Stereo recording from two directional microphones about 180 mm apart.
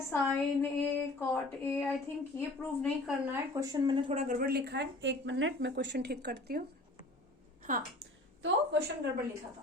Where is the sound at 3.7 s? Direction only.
25° right (ahead or behind).